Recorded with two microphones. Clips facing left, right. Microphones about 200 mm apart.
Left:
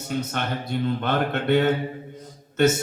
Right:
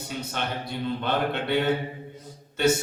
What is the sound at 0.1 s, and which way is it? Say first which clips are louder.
A man's voice: left 5 dB; 50° left (ahead or behind).